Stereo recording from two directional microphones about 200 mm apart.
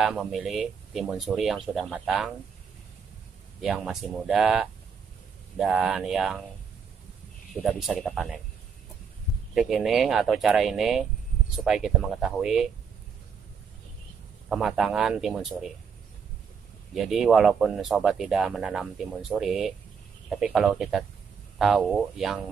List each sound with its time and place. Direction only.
0.0 s speech: centre (ahead or behind)
3.6 s speech: centre (ahead or behind)
7.6 s speech: centre (ahead or behind)
9.5 s speech: centre (ahead or behind)
14.5 s speech: centre (ahead or behind)
16.9 s speech: centre (ahead or behind)